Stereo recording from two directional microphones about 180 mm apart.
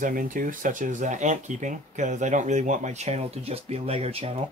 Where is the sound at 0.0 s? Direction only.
50° right (ahead or behind).